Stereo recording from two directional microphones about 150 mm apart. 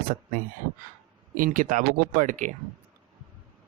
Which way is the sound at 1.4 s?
65° right (ahead or behind).